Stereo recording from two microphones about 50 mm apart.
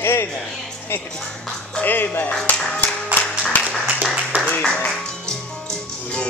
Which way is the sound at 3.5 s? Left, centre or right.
Left.